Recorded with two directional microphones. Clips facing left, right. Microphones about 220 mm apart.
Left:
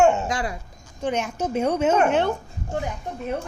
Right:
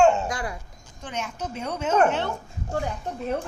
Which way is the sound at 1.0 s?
55° left (ahead or behind).